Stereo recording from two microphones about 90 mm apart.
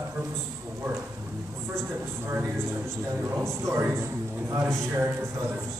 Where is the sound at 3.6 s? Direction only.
30° right (ahead or behind).